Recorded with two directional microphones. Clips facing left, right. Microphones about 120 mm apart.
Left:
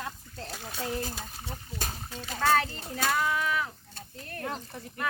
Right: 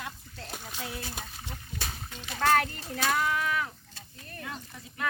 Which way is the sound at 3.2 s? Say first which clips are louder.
Even; 5° left (ahead or behind).